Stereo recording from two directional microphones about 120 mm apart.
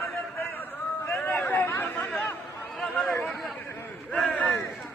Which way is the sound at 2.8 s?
Centre (ahead or behind).